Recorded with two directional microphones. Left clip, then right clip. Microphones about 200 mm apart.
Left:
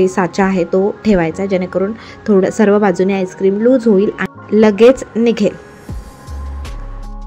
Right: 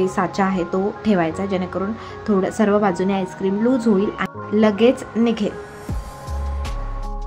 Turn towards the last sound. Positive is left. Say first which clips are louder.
# left 7 dB
turn(degrees=20)  # may be behind; listen again after turning